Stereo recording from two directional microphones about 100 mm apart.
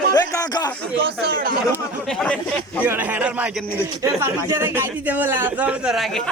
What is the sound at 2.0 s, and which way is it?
Speech, 5° left (ahead or behind).